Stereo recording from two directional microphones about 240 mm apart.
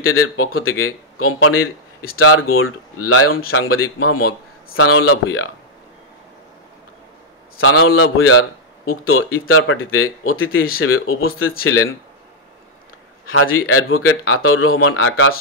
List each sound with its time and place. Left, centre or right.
0.0 s speech: left
7.5 s speech: left
13.3 s speech: left